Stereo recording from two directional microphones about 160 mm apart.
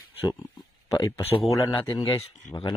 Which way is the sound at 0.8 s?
25° left (ahead or behind).